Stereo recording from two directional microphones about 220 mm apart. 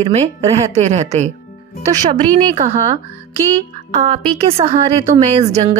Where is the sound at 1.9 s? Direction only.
20° right (ahead or behind).